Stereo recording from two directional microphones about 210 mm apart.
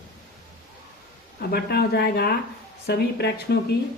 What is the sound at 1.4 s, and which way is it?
Speech, 45° left (ahead or behind).